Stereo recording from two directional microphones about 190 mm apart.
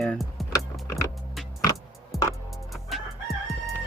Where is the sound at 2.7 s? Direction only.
Centre (ahead or behind).